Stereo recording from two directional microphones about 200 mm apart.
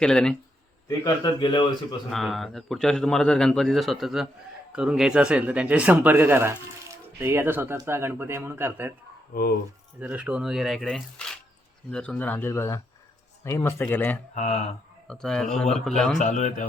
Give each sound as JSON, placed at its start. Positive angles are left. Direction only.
{"t": 0.0, "sound": "speech", "side_deg": 5}
{"t": 0.9, "sound": "a man's voice", "side_deg": 20}
{"t": 2.0, "sound": "speech", "side_deg": 0}
{"t": 10.0, "sound": "speech", "side_deg": -5}
{"t": 14.3, "sound": "a man's voice", "side_deg": 35}
{"t": 15.0, "sound": "speech", "side_deg": 5}
{"t": 16.1, "sound": "a man's voice", "side_deg": 35}